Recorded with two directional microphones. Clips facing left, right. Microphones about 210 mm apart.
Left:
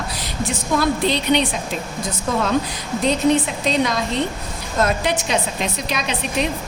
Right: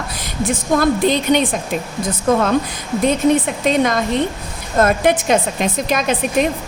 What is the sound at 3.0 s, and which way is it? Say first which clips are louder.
A woman's voice: right 2 dB; 50° right (ahead or behind).